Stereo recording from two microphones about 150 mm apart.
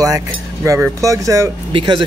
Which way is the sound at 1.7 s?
35° right (ahead or behind).